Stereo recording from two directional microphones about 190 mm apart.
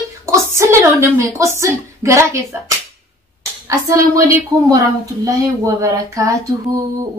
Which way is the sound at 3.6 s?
15° right (ahead or behind).